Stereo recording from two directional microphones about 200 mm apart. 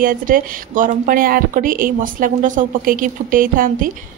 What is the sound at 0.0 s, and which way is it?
Speech, 45° right (ahead or behind).